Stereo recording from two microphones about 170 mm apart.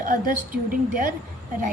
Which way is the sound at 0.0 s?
55° right (ahead or behind).